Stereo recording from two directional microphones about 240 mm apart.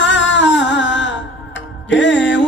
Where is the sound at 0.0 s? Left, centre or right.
Left.